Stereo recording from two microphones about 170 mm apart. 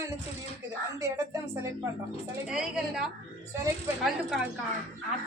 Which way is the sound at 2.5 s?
5° right (ahead or behind).